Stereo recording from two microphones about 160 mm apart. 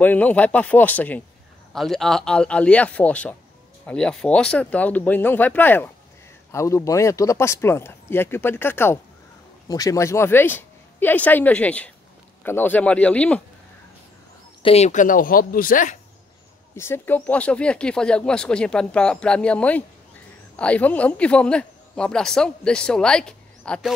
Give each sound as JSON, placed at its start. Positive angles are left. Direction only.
{"t": 0.0, "sound": "speech", "side_deg": 10}
{"t": 14.6, "sound": "speech", "side_deg": 40}
{"t": 16.7, "sound": "speech", "side_deg": 15}